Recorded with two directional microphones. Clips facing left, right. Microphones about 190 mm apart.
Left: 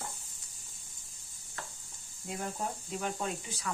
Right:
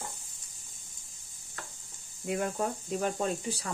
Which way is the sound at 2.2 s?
70° right (ahead or behind).